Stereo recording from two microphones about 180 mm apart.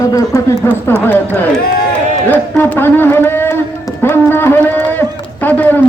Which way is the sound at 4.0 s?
10° left (ahead or behind).